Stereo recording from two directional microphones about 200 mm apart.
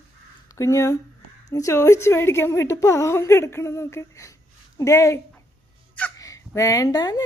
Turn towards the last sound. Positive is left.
turn(degrees=20)  # may be behind; listen again after turning